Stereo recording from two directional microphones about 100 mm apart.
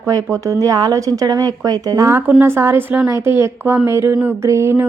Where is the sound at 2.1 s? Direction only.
20° right (ahead or behind).